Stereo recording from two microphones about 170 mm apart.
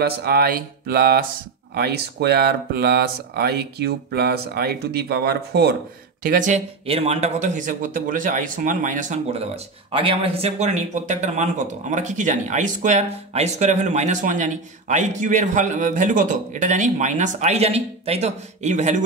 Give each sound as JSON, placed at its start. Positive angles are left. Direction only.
{"t": 0.2, "sound": "speech", "side_deg": -65}
{"t": 6.2, "sound": "speech", "side_deg": -50}
{"t": 6.9, "sound": "speech", "side_deg": -40}